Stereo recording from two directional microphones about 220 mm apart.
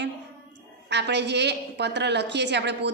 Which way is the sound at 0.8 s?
50° right (ahead or behind).